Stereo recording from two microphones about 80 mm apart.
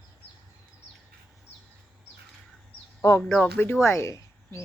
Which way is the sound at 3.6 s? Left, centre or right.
Left.